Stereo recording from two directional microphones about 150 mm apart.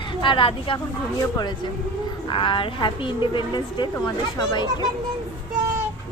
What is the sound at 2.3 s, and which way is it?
Speech, 35° left (ahead or behind).